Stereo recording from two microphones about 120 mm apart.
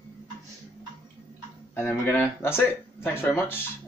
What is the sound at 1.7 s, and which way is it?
Speech, 15° left (ahead or behind).